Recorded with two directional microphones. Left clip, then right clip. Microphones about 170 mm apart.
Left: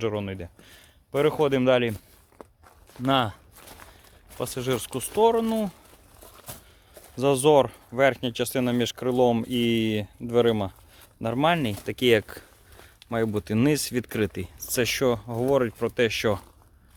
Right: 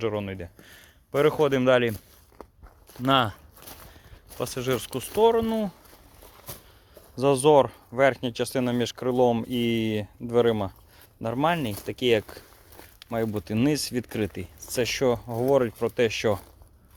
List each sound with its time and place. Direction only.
0.0 s speech: 15° left (ahead or behind)
3.1 s speech: 5° right (ahead or behind)
3.6 s a sound: 70° right (ahead or behind)
4.4 s speech: 5° left (ahead or behind)
7.2 s speech: 5° left (ahead or behind)